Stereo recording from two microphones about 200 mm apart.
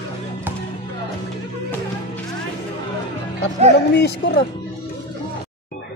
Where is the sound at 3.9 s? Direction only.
55° left (ahead or behind).